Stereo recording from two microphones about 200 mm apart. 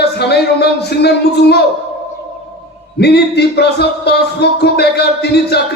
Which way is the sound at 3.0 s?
55° left (ahead or behind).